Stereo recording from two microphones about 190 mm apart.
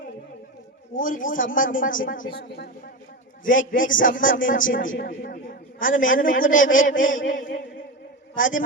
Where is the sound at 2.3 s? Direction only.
60° left (ahead or behind).